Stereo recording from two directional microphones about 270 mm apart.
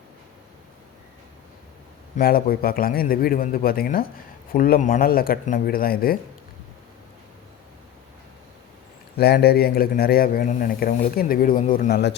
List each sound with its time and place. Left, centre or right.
2.1 s speech: left
9.1 s speech: left